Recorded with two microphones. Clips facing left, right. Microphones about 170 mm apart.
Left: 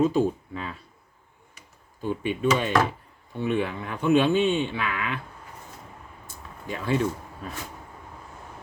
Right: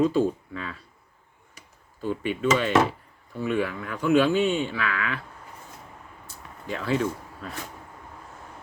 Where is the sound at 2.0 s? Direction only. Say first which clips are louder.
Even; 15° left (ahead or behind).